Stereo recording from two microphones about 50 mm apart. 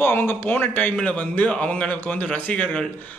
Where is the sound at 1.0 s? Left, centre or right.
Left.